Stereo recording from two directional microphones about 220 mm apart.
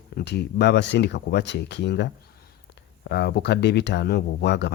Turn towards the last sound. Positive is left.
turn(degrees=50)  # may be behind; listen again after turning